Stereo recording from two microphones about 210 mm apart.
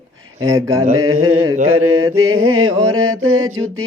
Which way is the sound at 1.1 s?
90° right.